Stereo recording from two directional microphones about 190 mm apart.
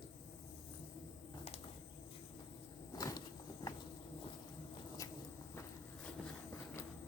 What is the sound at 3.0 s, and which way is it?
Vehicle, 20° left (ahead or behind).